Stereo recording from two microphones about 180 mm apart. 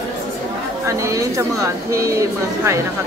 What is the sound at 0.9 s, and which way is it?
Speech, 15° right (ahead or behind).